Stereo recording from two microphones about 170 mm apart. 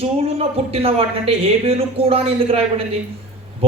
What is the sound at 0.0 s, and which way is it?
A man's voice, 35° right (ahead or behind).